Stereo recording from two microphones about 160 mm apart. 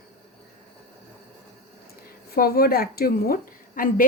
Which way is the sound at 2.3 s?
70° left (ahead or behind).